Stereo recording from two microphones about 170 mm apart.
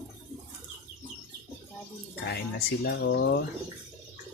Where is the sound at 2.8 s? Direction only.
75° left (ahead or behind).